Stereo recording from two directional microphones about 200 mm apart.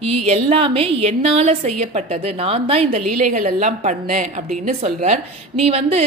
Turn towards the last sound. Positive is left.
turn(degrees=-30)  # may be behind; listen again after turning